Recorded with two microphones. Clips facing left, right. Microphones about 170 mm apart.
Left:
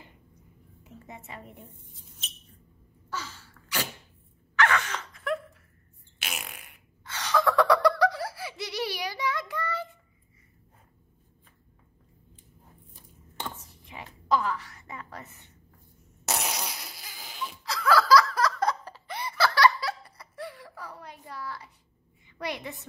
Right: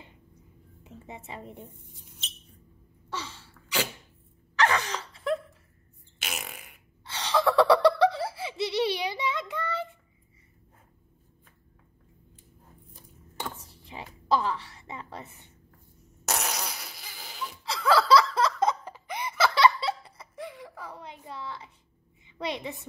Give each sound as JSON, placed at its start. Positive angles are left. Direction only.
{"t": 0.8, "sound": "a woman's voice", "side_deg": -25}
{"t": 3.1, "sound": "a sound", "side_deg": -30}
{"t": 4.6, "sound": "wail", "side_deg": -35}
{"t": 6.2, "sound": "fart", "side_deg": 0}
{"t": 7.1, "sound": "laughter", "side_deg": -30}
{"t": 13.6, "sound": "whispering", "side_deg": -30}
{"t": 14.3, "sound": "a sound", "side_deg": -30}
{"t": 16.3, "sound": "fart", "side_deg": 5}
{"t": 17.6, "sound": "laughter", "side_deg": -25}
{"t": 22.2, "sound": "a sound", "side_deg": -25}